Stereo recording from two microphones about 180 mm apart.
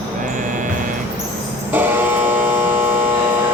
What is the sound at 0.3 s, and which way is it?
Music, 45° right (ahead or behind).